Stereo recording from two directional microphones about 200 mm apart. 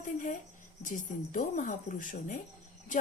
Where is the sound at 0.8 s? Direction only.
40° left (ahead or behind).